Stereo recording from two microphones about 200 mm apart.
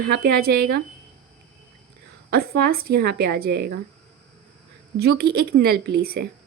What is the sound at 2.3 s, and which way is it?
A woman's voice, 50° right (ahead or behind).